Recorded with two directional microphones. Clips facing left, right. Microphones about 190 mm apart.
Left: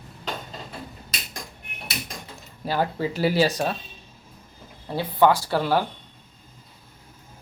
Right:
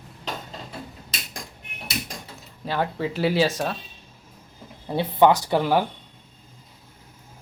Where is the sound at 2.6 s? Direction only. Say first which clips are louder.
Left 1 dB; 5° left (ahead or behind).